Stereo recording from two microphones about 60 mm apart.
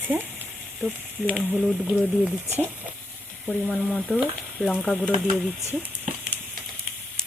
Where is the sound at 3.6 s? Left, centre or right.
Centre.